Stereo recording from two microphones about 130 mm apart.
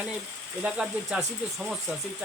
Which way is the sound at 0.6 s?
5° right (ahead or behind).